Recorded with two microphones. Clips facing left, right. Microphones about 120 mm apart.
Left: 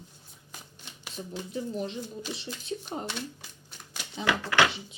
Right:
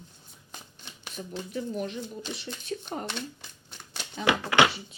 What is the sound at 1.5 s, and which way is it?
Speech, 25° left (ahead or behind).